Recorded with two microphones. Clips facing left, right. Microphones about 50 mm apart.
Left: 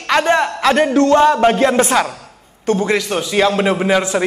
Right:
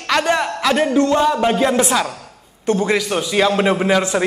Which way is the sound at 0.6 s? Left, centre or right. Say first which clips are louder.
Left 2 dB; left.